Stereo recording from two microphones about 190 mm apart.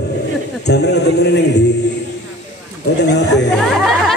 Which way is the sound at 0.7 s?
60° left (ahead or behind).